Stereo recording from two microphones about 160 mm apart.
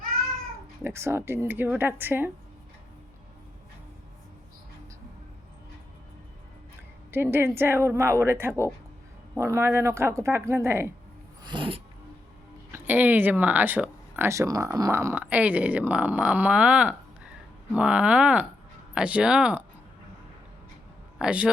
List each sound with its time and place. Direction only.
0.9 s speech: 15° right (ahead or behind)
7.1 s speech: 15° right (ahead or behind)
11.4 s a sound: 30° right (ahead or behind)
12.7 s speech: 10° right (ahead or behind)
21.2 s speech: 5° right (ahead or behind)